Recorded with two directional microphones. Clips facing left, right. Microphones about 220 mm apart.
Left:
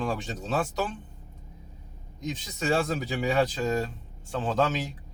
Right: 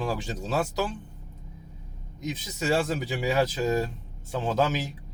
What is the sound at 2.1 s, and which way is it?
Speech, 5° right (ahead or behind).